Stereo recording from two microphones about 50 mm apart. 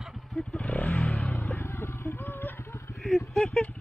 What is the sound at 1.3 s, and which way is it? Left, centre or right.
Vehicle, left.